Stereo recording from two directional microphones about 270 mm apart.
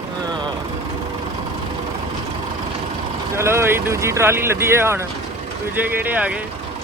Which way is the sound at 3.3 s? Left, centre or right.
Centre.